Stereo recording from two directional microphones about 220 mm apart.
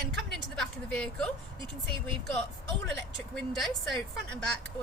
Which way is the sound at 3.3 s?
Centre (ahead or behind).